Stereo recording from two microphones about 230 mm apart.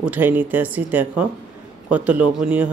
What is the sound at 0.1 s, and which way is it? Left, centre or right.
Speech, centre.